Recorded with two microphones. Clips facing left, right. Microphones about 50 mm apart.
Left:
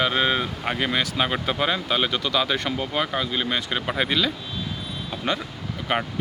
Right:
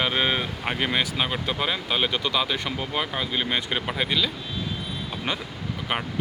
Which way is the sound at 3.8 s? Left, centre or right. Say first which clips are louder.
Left 2 dB; centre.